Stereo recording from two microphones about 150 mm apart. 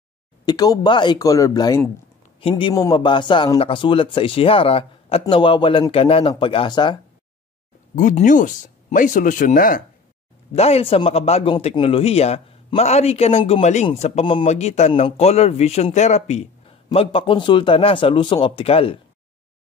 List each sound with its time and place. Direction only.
0.5 s speech: 25° left (ahead or behind)
7.9 s speech: 55° left (ahead or behind)
10.5 s a man's voice: 40° left (ahead or behind)